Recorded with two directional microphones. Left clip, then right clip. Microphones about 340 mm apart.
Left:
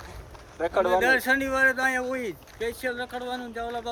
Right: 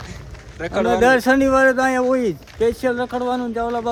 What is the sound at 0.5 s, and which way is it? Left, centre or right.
Speech, centre.